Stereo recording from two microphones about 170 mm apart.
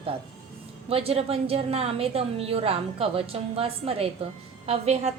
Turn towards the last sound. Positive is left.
turn(degrees=-40)  # may be behind; listen again after turning